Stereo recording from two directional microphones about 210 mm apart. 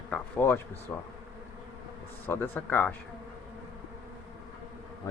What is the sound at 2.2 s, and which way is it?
Speech, 10° left (ahead or behind).